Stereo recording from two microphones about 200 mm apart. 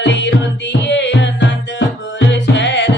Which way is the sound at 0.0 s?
65° left (ahead or behind).